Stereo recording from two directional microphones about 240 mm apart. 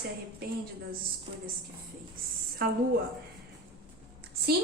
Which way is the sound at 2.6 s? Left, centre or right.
Right.